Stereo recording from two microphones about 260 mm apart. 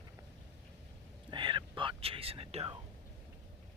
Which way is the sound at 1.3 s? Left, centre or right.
Centre.